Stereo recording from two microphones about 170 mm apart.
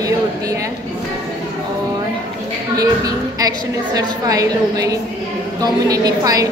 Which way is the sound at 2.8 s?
20° right (ahead or behind).